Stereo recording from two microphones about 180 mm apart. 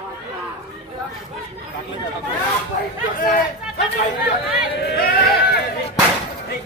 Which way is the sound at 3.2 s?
50° left (ahead or behind).